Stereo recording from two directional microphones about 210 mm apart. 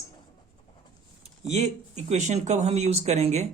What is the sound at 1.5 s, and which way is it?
Speech, 30° right (ahead or behind).